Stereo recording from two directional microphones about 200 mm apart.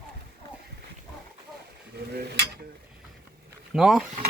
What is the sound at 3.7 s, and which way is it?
Speech, centre (ahead or behind).